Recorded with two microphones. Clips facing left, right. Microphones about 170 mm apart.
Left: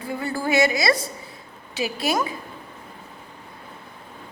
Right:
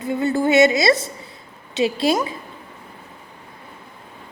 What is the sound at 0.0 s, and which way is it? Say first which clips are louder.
A woman's voice: right 7 dB; 20° right (ahead or behind).